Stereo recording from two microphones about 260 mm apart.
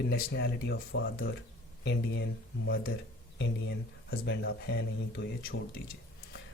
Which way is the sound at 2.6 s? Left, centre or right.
Left.